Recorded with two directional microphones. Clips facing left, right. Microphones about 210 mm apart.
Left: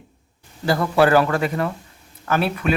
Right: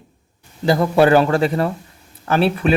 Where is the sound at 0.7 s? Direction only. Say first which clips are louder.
Right 3 dB; 20° right (ahead or behind).